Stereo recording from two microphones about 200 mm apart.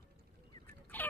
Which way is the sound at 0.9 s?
10° left (ahead or behind).